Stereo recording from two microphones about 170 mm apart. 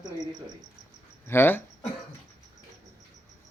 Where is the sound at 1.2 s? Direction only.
15° left (ahead or behind).